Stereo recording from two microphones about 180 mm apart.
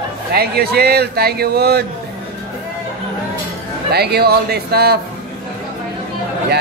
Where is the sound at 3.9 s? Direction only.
60° right (ahead or behind).